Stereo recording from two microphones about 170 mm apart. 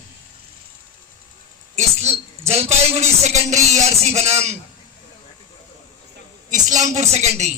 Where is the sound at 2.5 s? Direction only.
40° right (ahead or behind).